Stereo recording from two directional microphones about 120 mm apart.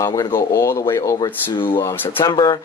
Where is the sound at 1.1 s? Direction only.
40° left (ahead or behind).